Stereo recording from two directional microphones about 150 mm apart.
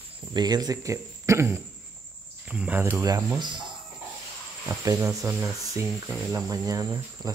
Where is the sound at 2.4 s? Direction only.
10° right (ahead or behind); by 3.5 s 25° right (ahead or behind).